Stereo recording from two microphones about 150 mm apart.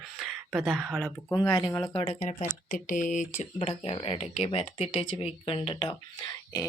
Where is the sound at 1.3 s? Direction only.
20° left (ahead or behind).